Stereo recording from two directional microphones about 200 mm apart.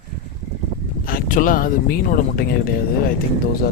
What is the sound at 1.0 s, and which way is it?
Speech, 45° left (ahead or behind).